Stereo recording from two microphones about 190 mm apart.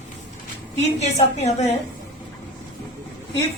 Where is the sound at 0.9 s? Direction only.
35° left (ahead or behind).